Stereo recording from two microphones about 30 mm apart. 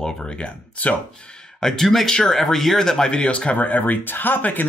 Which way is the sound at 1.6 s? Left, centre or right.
Centre.